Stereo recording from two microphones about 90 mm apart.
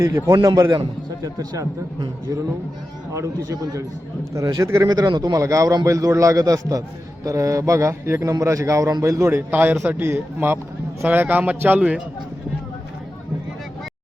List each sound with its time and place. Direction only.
0.0 s a man's voice: 35° right (ahead or behind)
3.1 s a man's voice: 40° right (ahead or behind)
4.9 s speech: 50° right (ahead or behind)
5.3 s a man's voice: 40° right (ahead or behind); by 12.0 s 10° right (ahead or behind)